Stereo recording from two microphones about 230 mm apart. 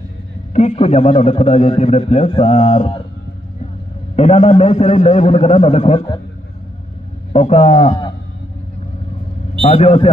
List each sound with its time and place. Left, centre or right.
0.5 s a man's voice: left
4.2 s a man's voice: left
7.3 s a man's voice: left
9.6 s a man's voice: left